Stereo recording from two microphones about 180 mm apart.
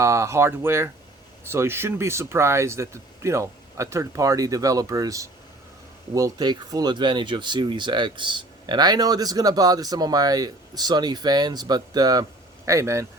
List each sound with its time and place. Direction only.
0.0 s speech: 15° right (ahead or behind)